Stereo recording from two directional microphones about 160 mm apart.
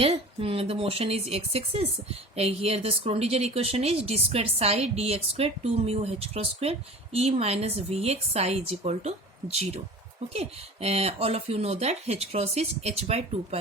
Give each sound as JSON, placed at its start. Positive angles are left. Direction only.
{"t": 0.0, "sound": "speech", "side_deg": -35}